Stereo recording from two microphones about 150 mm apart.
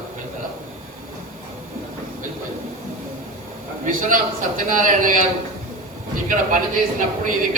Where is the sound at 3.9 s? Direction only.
65° right (ahead or behind).